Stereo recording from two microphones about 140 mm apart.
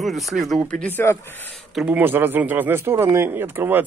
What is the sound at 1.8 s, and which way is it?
Speech, 10° right (ahead or behind).